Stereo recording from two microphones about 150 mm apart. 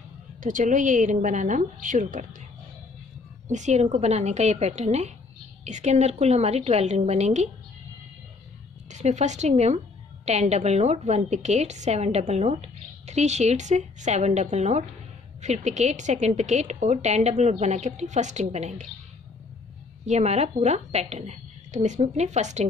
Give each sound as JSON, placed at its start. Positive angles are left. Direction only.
{"t": 0.4, "sound": "a woman's voice", "side_deg": -60}
{"t": 3.4, "sound": "a woman's voice", "side_deg": -55}
{"t": 8.9, "sound": "a woman's voice", "side_deg": -50}
{"t": 20.1, "sound": "a woman's voice", "side_deg": -50}